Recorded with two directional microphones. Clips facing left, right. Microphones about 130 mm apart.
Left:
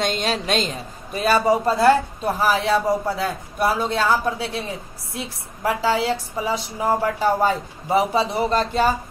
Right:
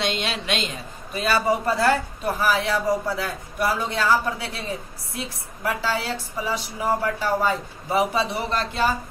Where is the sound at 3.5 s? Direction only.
25° left (ahead or behind).